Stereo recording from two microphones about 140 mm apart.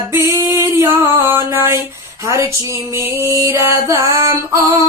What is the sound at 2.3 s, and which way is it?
Female singing, 20° right (ahead or behind).